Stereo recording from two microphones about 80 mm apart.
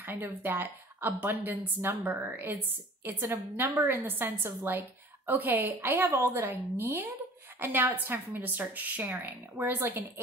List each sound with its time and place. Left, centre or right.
0.0 s a woman's voice: right